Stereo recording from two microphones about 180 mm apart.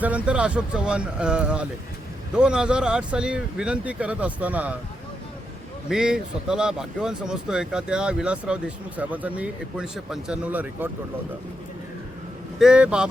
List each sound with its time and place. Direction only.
0.0 s speech: 5° right (ahead or behind)
5.9 s speech: 5° right (ahead or behind)
12.5 s speech: 5° right (ahead or behind)